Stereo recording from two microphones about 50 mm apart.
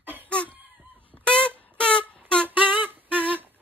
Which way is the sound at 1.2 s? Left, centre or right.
Left.